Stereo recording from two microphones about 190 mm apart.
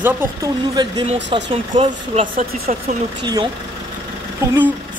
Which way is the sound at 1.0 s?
30° right (ahead or behind).